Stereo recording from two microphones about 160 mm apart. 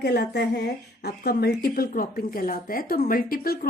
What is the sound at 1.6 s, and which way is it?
A woman's voice, 65° left (ahead or behind).